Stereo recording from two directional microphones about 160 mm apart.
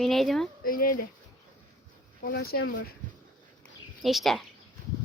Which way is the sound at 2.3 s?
80° left.